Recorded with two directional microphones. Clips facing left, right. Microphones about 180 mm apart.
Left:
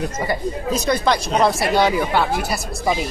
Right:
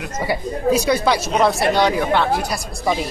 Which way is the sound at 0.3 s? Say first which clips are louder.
Right 7 dB; 10° right (ahead or behind).